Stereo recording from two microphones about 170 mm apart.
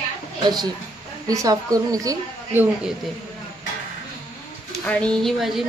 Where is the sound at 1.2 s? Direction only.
20° right (ahead or behind).